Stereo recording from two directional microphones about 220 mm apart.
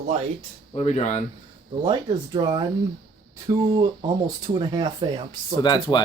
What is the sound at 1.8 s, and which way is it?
Speech, 15° right (ahead or behind).